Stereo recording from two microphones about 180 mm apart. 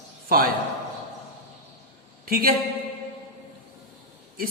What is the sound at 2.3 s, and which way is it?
Speech, 55° right (ahead or behind).